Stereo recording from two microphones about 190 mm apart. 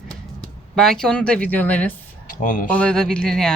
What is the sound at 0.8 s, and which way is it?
Speech, 5° left (ahead or behind).